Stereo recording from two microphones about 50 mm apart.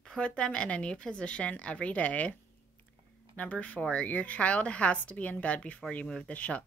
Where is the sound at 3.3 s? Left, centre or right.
Left.